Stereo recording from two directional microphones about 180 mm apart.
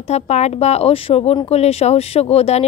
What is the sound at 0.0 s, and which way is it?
Speech, 40° left (ahead or behind).